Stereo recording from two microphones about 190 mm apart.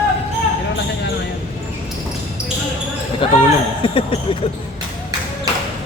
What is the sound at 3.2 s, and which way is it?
Speech, 25° left (ahead or behind).